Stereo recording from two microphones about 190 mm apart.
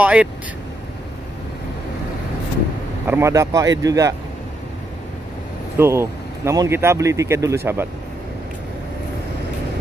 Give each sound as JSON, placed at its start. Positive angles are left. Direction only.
{"t": 0.0, "sound": "speech", "side_deg": -5}
{"t": 3.1, "sound": "speech", "side_deg": -15}
{"t": 5.8, "sound": "speech", "side_deg": -15}